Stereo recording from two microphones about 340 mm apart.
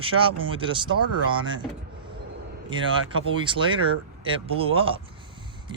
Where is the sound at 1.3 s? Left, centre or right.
Centre.